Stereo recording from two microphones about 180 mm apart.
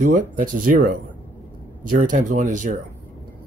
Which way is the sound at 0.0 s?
45° right (ahead or behind).